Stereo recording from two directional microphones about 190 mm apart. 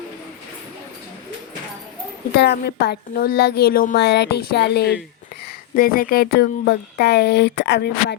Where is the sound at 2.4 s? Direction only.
60° left (ahead or behind).